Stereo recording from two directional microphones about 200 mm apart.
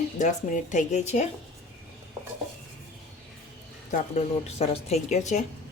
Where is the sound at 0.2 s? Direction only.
40° left (ahead or behind).